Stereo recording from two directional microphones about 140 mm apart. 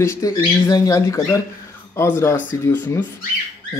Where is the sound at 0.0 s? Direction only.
20° left (ahead or behind).